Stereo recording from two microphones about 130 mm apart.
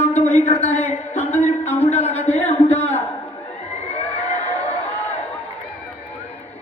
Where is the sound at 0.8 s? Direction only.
55° left (ahead or behind).